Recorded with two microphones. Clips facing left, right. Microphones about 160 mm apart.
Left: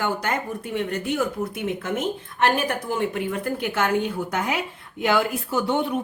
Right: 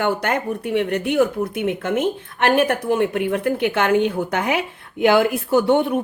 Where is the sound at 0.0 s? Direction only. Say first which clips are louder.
Right 5 dB; 60° right (ahead or behind).